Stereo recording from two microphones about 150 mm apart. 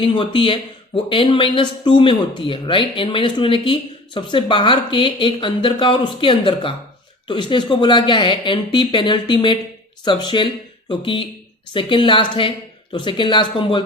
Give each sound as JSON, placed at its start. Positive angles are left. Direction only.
{"t": 0.0, "sound": "speech", "side_deg": 35}